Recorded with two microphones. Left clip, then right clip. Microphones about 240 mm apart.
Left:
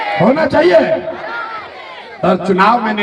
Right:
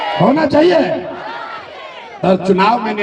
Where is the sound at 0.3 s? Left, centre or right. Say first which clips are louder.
Left 1 dB; left.